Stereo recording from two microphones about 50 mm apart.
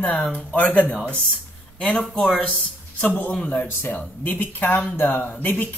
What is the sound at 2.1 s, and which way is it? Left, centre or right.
Speech, left.